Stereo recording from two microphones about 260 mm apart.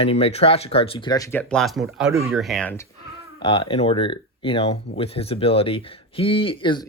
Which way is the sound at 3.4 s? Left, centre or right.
Centre.